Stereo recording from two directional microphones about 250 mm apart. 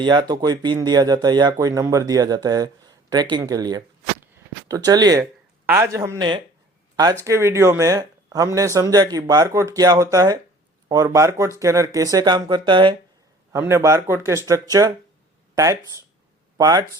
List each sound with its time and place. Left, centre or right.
0.0 s speech: centre